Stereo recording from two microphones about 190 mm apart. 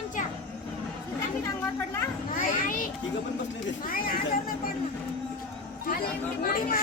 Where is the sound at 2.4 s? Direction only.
45° left (ahead or behind).